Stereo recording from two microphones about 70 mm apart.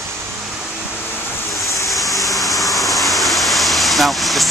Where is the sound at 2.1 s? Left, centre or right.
Left.